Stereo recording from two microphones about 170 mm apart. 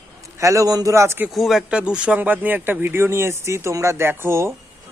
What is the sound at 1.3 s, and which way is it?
Speech, centre (ahead or behind).